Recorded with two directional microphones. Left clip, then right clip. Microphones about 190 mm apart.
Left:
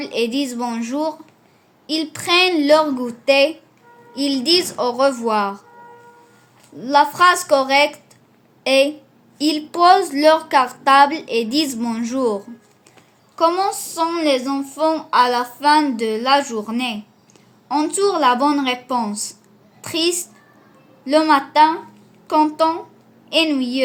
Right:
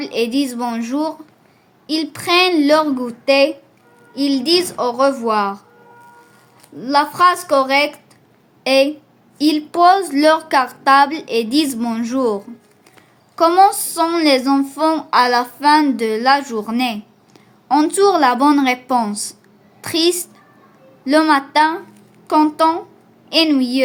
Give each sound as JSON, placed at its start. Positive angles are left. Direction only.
{"t": 0.0, "sound": "a woman's voice", "side_deg": -15}
{"t": 6.7, "sound": "a woman's voice", "side_deg": -10}
{"t": 13.3, "sound": "speech", "side_deg": -30}